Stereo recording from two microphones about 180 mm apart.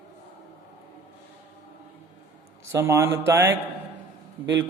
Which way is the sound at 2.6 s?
15° right (ahead or behind).